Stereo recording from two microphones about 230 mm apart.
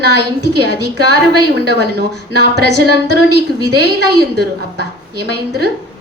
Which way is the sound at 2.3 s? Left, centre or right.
Right.